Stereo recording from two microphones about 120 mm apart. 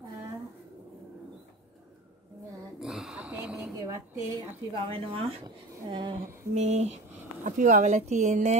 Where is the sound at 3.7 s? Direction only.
25° right (ahead or behind).